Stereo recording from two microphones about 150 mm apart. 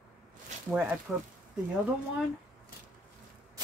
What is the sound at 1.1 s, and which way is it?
Speech, 5° right (ahead or behind).